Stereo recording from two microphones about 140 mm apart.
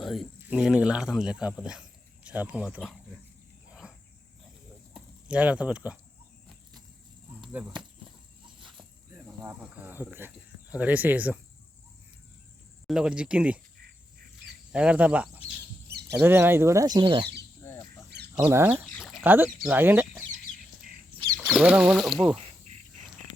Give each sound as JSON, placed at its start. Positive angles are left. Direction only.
{"t": 0.0, "sound": "speech", "side_deg": 0}
{"t": 3.8, "sound": "cricket", "side_deg": -10}
{"t": 4.9, "sound": "speech", "side_deg": -10}
{"t": 9.1, "sound": "speech", "side_deg": -20}
{"t": 12.9, "sound": "speech", "side_deg": -5}
{"t": 14.7, "sound": "speech", "side_deg": -10}
{"t": 17.6, "sound": "bird", "side_deg": 20}
{"t": 18.3, "sound": "speech", "side_deg": -15}
{"t": 18.9, "sound": "a sound", "side_deg": 5}
{"t": 19.2, "sound": "speech", "side_deg": -15}
{"t": 21.3, "sound": "speech", "side_deg": -5}